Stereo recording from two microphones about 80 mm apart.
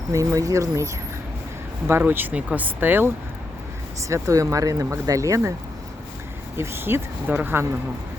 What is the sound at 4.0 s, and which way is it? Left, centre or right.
Speech, right.